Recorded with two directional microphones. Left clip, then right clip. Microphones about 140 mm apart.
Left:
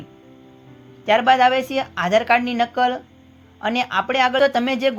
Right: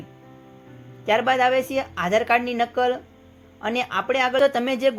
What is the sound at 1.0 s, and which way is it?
Speech, 30° left (ahead or behind).